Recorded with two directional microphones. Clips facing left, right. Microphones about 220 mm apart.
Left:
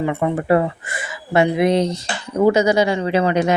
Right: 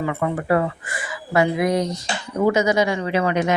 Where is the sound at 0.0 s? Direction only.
20° left (ahead or behind).